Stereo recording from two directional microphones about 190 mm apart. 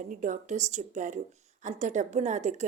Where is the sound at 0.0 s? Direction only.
40° right (ahead or behind).